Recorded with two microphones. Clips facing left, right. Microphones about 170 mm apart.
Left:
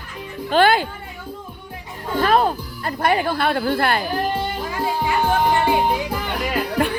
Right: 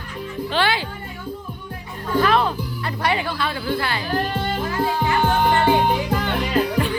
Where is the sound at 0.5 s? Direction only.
50° left (ahead or behind).